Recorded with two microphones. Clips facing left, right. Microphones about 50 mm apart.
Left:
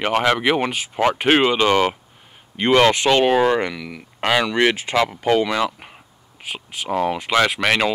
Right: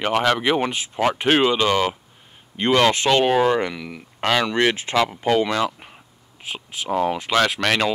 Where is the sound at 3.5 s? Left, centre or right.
Centre.